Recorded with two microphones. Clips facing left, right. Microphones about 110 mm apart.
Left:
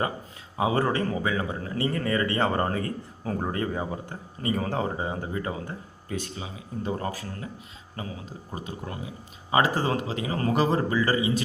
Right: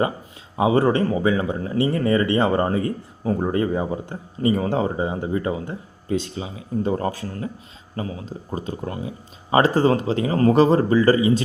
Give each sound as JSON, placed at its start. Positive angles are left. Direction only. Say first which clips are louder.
{"t": 0.5, "sound": "a man's voice", "louder": "right 7 dB", "side_deg": -25}